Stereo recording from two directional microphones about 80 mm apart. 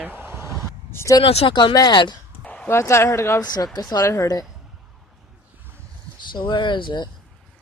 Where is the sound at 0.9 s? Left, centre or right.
Left.